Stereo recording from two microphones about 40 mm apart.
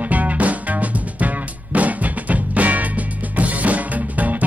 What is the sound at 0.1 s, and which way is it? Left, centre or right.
Music, right.